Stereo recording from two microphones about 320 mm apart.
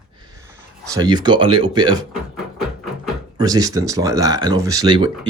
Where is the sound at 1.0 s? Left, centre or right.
Centre.